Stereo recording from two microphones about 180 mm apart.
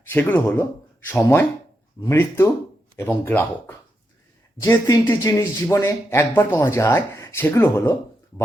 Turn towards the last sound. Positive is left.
turn(degrees=15)  # may be behind; listen again after turning